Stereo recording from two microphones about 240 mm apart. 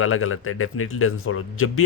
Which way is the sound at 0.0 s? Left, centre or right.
Left.